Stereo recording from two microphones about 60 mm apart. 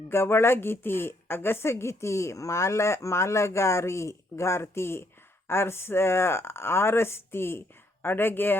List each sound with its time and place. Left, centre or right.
0.1 s a woman's voice: left